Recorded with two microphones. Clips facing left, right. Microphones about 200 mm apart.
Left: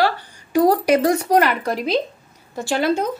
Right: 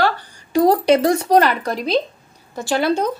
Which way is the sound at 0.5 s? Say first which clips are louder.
Right 1 dB; 25° right (ahead or behind).